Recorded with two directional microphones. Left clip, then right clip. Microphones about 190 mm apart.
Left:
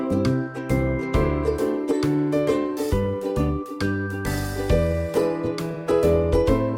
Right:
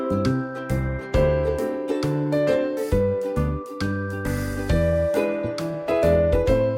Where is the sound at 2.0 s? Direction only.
Centre (ahead or behind).